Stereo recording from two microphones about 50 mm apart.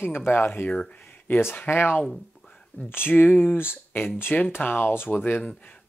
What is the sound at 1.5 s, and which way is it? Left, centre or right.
Speech, left.